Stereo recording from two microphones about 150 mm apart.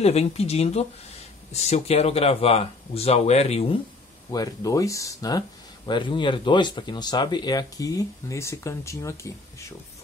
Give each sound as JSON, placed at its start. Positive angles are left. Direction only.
{"t": 0.0, "sound": "speech", "side_deg": 45}
{"t": 4.3, "sound": "speech", "side_deg": 25}